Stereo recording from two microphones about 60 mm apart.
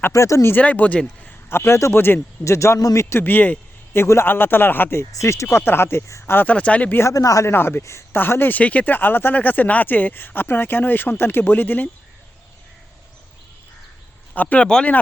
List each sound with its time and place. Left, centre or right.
0.1 s a man's voice: left
0.6 s speech: left
1.5 s speech: left
2.4 s a man's voice: left
3.2 s speech: left
3.9 s speech: left
5.1 s a man's voice: left
5.5 s speech: left
6.3 s speech: left
7.1 s speech: left
7.5 s speech: left
8.2 s speech: left
8.5 s speech: left
14.3 s speech: left